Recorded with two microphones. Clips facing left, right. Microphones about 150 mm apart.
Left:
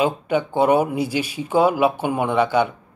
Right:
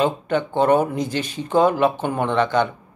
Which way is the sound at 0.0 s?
10° left (ahead or behind).